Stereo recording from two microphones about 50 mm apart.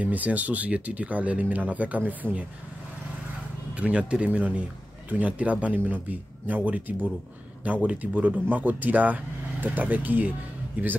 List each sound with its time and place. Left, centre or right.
0.0 s speech: right
3.7 s speech: right